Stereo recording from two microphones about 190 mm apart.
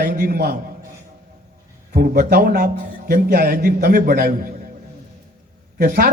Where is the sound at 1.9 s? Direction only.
50° right (ahead or behind).